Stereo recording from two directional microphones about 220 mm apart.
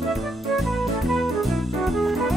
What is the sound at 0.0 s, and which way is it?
Music, centre (ahead or behind).